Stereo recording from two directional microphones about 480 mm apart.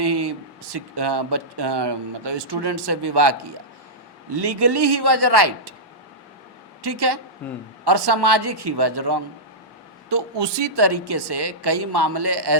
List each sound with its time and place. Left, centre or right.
0.0 s speech: right
4.4 s speech: right
6.8 s speech: right